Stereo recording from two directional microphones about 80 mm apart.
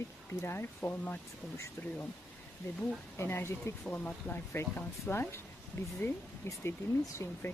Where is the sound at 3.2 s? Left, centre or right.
Left.